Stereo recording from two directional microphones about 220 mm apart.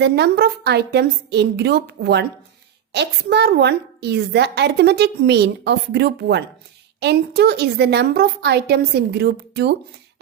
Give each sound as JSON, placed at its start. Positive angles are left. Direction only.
{"t": 0.0, "sound": "a woman's voice", "side_deg": -50}